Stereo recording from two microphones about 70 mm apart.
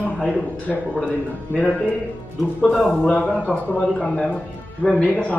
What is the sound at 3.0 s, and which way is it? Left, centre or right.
A man's voice, centre.